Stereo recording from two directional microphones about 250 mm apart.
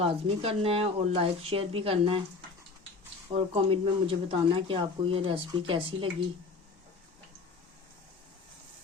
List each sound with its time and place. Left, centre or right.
0.0 s speech: right
3.3 s speech: right